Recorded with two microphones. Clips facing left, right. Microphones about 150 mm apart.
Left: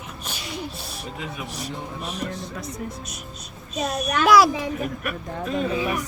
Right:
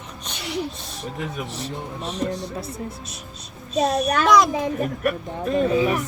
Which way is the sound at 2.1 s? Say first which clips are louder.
Right 8 dB; 30° right (ahead or behind).